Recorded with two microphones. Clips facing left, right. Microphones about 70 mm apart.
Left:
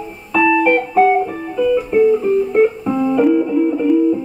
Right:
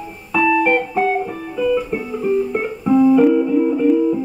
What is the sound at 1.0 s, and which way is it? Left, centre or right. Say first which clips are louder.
Music: left 5 dB; centre.